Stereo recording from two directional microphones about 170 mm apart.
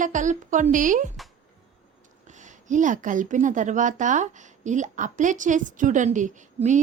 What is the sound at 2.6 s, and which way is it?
Speech, 50° right (ahead or behind).